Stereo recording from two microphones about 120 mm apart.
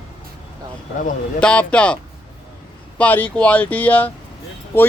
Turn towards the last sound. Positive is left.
turn(degrees=20)  # may be behind; listen again after turning